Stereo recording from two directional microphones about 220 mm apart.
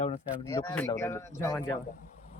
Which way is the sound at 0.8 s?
10° left (ahead or behind).